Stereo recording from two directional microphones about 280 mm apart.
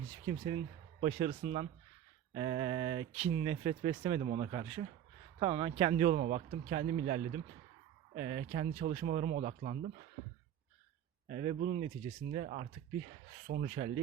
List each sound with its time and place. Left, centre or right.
0.3 s speech: right
11.3 s speech: right